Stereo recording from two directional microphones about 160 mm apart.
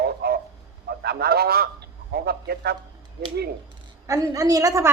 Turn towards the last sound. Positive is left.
turn(degrees=-20)  # may be behind; listen again after turning